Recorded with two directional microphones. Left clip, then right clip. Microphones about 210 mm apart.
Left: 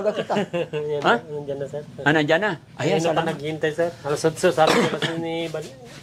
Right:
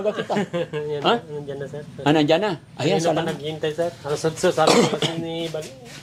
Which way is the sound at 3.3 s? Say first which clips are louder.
Left 1 dB; 30° left (ahead or behind).